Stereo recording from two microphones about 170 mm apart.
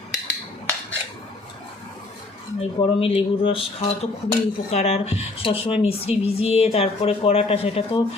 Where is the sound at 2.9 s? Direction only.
35° left (ahead or behind).